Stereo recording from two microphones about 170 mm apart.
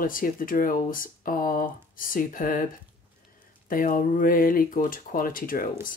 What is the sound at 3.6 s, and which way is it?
Speech, 55° left (ahead or behind).